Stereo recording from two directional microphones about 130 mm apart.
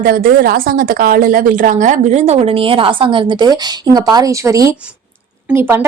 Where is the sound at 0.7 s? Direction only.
90° right.